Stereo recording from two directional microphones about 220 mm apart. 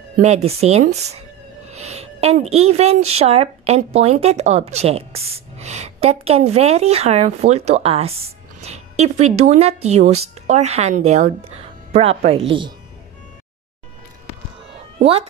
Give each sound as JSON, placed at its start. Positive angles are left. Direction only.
{"t": 0.1, "sound": "a woman's voice", "side_deg": -30}